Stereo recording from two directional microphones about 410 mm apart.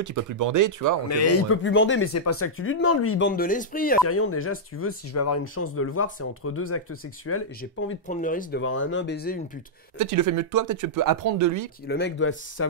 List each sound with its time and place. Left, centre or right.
0.0 s speech: right
1.1 s speech: left
4.1 s speech: left
8.1 s speech: centre
9.9 s speech: right
11.9 s speech: left